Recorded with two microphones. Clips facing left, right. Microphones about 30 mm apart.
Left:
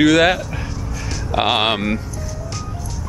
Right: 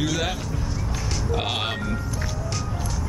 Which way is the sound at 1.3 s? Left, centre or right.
Left.